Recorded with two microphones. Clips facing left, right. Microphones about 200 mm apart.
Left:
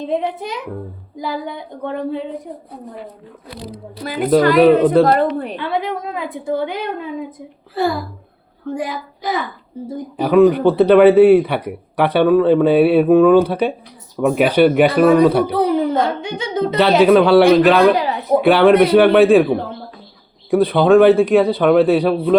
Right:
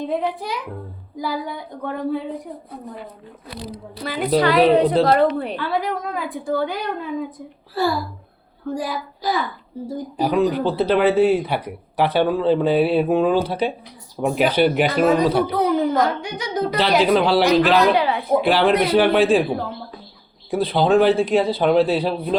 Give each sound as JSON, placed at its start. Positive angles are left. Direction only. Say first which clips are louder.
{"t": 0.0, "sound": "a woman's voice", "louder": "left 2 dB", "side_deg": 20}
{"t": 4.3, "sound": "a woman's voice", "louder": "left 5 dB", "side_deg": 45}
{"t": 5.5, "sound": "a woman's voice", "louder": "left 2 dB", "side_deg": 25}
{"t": 8.7, "sound": "a woman's voice", "louder": "left 2 dB", "side_deg": 20}
{"t": 10.2, "sound": "speech", "louder": "left 7 dB", "side_deg": 60}
{"t": 15.5, "sound": "a woman's voice", "louder": "left 2 dB", "side_deg": 30}
{"t": 17.0, "sound": "speech", "louder": "left 8 dB", "side_deg": 60}
{"t": 17.9, "sound": "a sound", "louder": "left 1 dB", "side_deg": 40}
{"t": 18.4, "sound": "speech", "louder": "left 9 dB", "side_deg": 60}
{"t": 20.5, "sound": "speech", "louder": "left 6 dB", "side_deg": 60}